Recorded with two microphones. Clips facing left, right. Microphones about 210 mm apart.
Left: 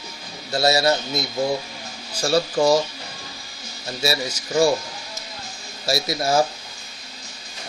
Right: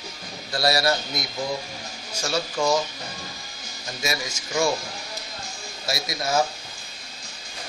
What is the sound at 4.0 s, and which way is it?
Speech, 30° left (ahead or behind).